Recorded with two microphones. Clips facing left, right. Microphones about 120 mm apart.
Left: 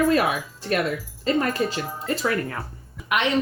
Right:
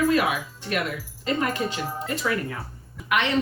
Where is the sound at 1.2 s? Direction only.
40° left (ahead or behind).